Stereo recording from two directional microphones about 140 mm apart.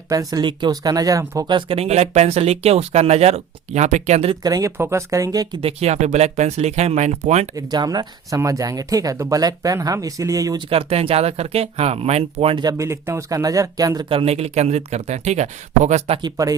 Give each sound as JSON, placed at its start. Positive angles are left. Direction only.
{"t": 0.1, "sound": "speech", "side_deg": -25}
{"t": 1.5, "sound": "speech", "side_deg": -40}
{"t": 4.4, "sound": "speech", "side_deg": -25}
{"t": 5.6, "sound": "speech", "side_deg": -50}
{"t": 7.5, "sound": "speech", "side_deg": -30}
{"t": 10.7, "sound": "speech", "side_deg": -40}
{"t": 12.5, "sound": "speech", "side_deg": -25}
{"t": 14.1, "sound": "speech", "side_deg": -45}
{"t": 16.2, "sound": "speech", "side_deg": -25}